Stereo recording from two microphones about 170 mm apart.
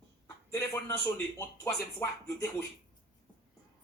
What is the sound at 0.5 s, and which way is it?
Speech, 15° left (ahead or behind).